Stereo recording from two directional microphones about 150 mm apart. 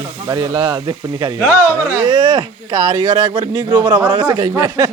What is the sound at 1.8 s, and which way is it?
Speech, 20° right (ahead or behind).